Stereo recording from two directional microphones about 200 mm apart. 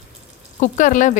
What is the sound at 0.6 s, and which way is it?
Frying, 40° left (ahead or behind).